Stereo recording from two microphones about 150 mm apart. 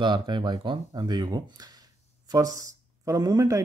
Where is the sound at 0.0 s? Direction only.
30° right (ahead or behind).